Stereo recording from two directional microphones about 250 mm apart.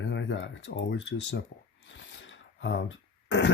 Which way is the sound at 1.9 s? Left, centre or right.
Left.